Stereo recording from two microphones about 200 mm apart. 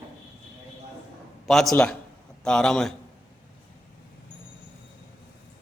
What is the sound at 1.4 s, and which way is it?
A man's voice, centre (ahead or behind).